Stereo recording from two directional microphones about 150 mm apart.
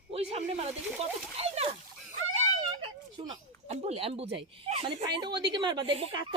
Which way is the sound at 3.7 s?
45° right (ahead or behind).